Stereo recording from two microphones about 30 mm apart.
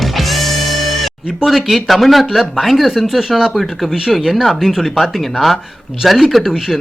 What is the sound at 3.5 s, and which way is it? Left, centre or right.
Speech, centre.